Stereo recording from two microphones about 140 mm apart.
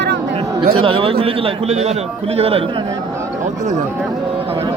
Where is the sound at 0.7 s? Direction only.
40° right (ahead or behind).